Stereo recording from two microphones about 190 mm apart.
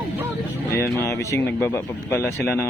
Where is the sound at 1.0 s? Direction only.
15° left (ahead or behind).